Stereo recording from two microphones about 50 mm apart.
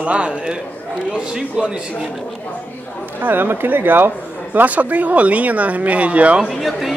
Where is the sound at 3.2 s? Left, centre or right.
Right.